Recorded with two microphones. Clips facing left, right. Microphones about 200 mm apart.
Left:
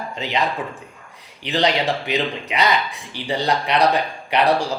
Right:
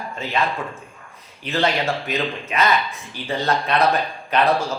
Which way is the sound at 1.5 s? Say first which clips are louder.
Left 1 dB; 15° left (ahead or behind).